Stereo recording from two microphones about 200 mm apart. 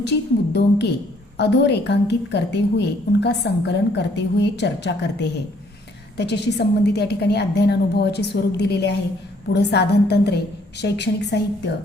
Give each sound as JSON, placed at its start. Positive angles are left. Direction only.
{"t": 0.0, "sound": "a woman's voice", "side_deg": 60}